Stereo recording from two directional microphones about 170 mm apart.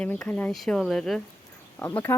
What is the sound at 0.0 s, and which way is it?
Speech, 5° left (ahead or behind).